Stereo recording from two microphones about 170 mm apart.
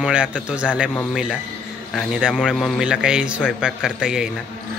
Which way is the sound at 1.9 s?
Centre (ahead or behind).